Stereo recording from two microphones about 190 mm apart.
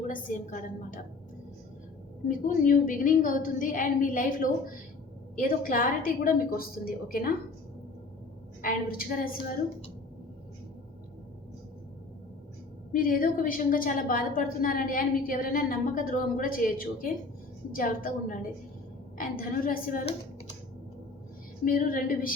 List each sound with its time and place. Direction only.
0.1 s a woman's voice: 45° left (ahead or behind)
2.2 s a woman's voice: 45° left (ahead or behind)
8.6 s a woman's voice: 50° left (ahead or behind)
12.9 s a woman's voice: 45° left (ahead or behind)
21.6 s a woman's voice: 45° left (ahead or behind)